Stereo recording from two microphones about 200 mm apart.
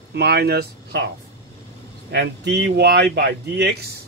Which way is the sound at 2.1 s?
55° right (ahead or behind).